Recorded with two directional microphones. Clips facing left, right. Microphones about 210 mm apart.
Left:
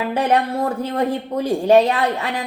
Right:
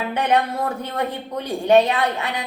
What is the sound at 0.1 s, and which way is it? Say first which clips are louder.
A woman's voice: left 1 dB; 30° left (ahead or behind).